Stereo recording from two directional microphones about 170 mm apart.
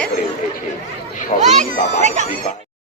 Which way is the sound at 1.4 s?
45° right (ahead or behind).